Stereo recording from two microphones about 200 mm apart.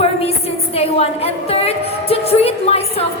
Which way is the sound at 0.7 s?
30° left (ahead or behind).